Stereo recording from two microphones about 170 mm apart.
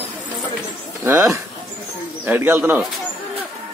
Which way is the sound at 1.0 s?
15° right (ahead or behind).